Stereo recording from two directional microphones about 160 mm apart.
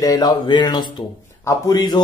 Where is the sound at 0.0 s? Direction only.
25° left (ahead or behind).